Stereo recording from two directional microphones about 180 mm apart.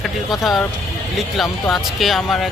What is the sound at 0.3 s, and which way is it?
Speech, centre (ahead or behind).